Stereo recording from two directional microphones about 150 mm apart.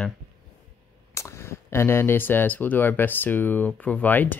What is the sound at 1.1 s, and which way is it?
Speech, 20° left (ahead or behind).